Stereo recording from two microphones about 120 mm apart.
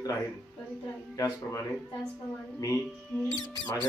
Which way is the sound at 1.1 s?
30° left (ahead or behind).